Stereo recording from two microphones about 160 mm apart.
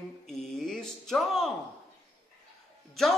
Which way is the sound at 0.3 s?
Centre (ahead or behind).